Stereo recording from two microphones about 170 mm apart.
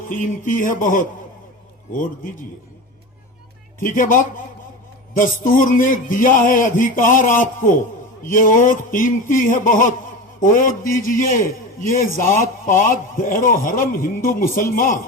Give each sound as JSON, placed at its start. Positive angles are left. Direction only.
{"t": 0.1, "sound": "a man's voice", "side_deg": 50}
{"t": 3.8, "sound": "a man's voice", "side_deg": 50}